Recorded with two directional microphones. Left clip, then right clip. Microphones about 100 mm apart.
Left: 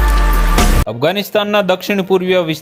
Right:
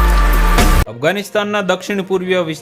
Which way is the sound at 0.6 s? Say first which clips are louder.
Even; centre (ahead or behind).